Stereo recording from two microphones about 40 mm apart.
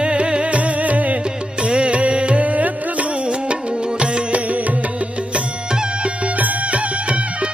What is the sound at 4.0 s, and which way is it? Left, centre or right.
Music, right.